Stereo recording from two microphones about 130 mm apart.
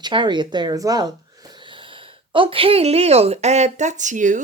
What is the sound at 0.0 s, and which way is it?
Speech, 35° right (ahead or behind).